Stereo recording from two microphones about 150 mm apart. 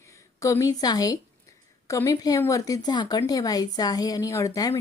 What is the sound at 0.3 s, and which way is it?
Speech, 20° left (ahead or behind).